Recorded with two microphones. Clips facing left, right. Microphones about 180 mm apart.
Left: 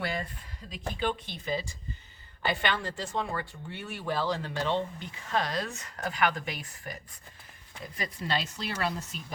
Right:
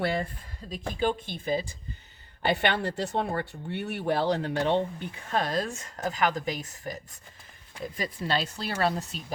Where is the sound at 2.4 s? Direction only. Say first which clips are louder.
Right 4 dB; 60° right (ahead or behind); by 6.9 s 40° right (ahead or behind).